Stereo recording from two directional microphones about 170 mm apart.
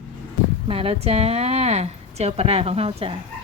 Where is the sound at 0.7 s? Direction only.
35° right (ahead or behind).